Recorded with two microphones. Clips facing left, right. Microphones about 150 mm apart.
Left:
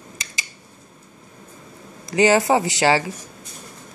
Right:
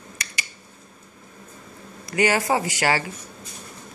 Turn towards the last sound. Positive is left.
turn(degrees=20)  # may be behind; listen again after turning